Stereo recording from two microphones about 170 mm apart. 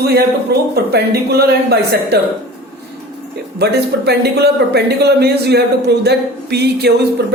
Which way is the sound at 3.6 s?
70° right (ahead or behind).